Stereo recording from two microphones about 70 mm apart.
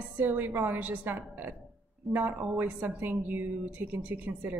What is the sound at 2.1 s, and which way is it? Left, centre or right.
A woman's voice, right.